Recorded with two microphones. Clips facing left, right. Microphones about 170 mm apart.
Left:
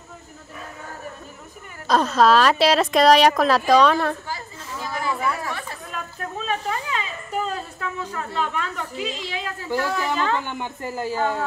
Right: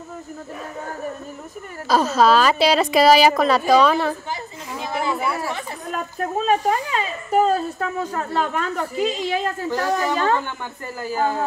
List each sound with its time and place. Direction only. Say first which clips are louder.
1.9 s speech: right 1 dB; 5° right (ahead or behind)
4.3 s chatter: right 3 dB; 20° right (ahead or behind)
5.9 s a sound: right 10 dB; 45° right (ahead or behind)
10.4 s speech: left 2 dB; 20° left (ahead or behind)
11.1 s speech: right 3 dB; 35° right (ahead or behind)